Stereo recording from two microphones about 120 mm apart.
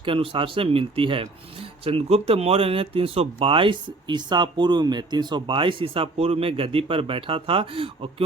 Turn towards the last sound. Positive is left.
turn(degrees=-50)  # may be behind; listen again after turning